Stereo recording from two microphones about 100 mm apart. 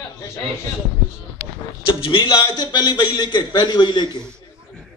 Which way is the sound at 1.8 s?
60° left (ahead or behind).